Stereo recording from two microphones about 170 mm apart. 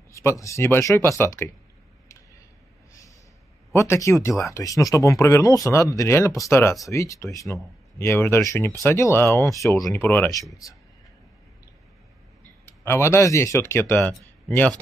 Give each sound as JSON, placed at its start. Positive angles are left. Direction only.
{"t": 0.1, "sound": "speech", "side_deg": 15}
{"t": 3.7, "sound": "speech", "side_deg": 15}
{"t": 12.6, "sound": "speech", "side_deg": 15}